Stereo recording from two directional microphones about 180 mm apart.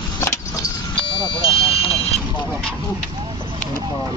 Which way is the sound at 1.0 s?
30° left (ahead or behind).